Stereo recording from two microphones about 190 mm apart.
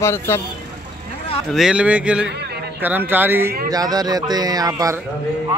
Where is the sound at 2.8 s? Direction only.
10° right (ahead or behind).